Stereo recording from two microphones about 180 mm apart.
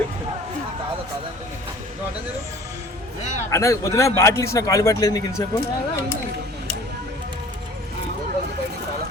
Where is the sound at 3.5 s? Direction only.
15° left (ahead or behind).